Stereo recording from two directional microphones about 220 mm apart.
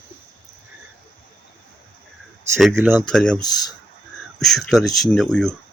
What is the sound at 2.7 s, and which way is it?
Speech, 10° right (ahead or behind).